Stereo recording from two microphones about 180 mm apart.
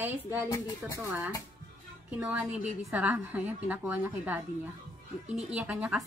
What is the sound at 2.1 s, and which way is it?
A woman's voice, 5° right (ahead or behind).